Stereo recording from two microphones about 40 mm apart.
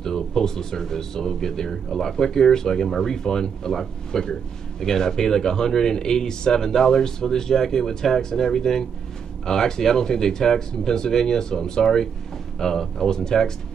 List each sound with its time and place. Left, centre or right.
0.0 s speech: centre